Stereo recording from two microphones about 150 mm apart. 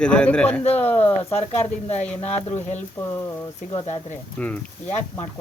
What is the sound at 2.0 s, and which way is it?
Speech, 10° left (ahead or behind).